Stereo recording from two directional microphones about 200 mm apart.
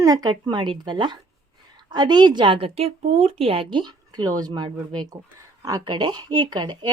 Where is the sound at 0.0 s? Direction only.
20° right (ahead or behind).